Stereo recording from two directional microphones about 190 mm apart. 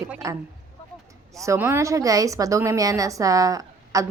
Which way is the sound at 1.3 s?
15° right (ahead or behind).